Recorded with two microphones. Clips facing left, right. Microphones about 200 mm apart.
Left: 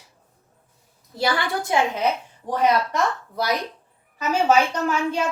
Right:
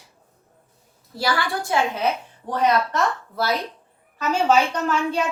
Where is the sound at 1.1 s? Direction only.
20° left (ahead or behind).